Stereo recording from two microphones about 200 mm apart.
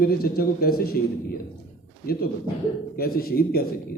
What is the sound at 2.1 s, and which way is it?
A man's voice, 50° left (ahead or behind).